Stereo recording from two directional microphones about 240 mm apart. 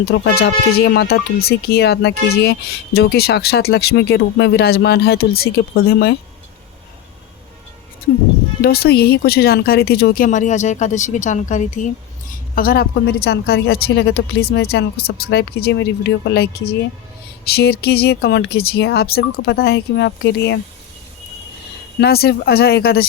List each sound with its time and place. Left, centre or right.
0.0 s speech: left
8.6 s speech: left
22.0 s speech: left